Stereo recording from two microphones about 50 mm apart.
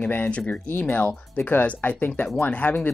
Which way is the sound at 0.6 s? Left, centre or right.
Left.